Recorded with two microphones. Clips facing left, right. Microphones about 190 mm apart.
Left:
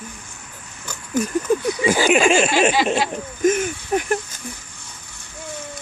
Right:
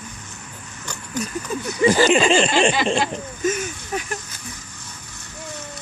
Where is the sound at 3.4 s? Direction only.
55° left (ahead or behind).